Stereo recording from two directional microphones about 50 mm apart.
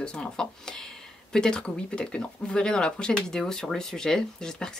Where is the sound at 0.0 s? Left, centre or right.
Centre.